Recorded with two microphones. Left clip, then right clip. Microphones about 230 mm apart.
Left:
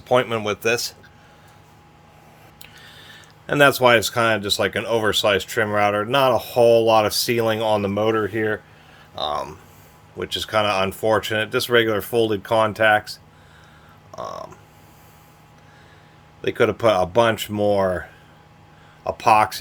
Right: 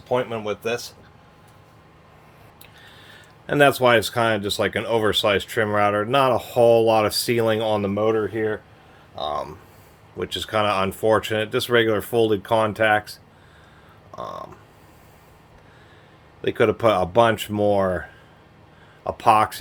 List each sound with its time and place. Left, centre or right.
0.1 s speech: left
2.6 s speech: left; by 13.1 s centre
14.2 s speech: centre
16.4 s speech: centre
19.0 s speech: centre